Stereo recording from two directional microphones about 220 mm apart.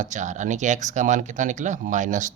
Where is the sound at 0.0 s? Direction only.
35° right (ahead or behind).